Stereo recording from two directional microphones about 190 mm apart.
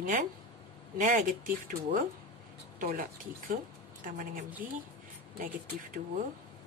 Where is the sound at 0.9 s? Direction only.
45° right (ahead or behind).